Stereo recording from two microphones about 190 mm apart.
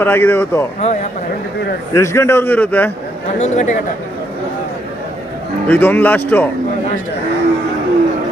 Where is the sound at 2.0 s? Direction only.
15° left (ahead or behind).